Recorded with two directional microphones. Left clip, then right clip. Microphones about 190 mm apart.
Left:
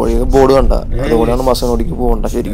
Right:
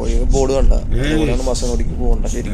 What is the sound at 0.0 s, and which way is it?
Speech, 30° left (ahead or behind).